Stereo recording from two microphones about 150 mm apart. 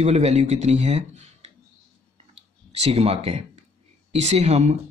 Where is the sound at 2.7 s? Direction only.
45° right (ahead or behind).